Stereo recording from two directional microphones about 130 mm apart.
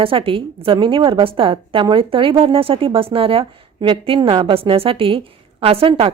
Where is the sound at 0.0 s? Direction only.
45° right (ahead or behind).